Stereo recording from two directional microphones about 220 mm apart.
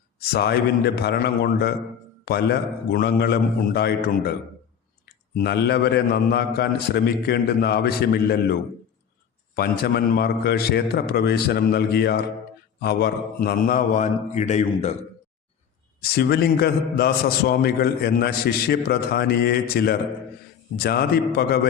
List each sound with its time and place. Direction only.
0.3 s a man's voice: 45° left (ahead or behind)
5.4 s a man's voice: 45° left (ahead or behind)
9.6 s a man's voice: 45° left (ahead or behind)
16.0 s a man's voice: 45° left (ahead or behind)